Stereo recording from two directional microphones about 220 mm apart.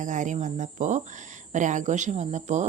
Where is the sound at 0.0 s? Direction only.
35° right (ahead or behind).